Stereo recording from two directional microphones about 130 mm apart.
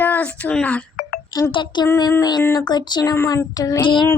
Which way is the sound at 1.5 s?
35° left (ahead or behind).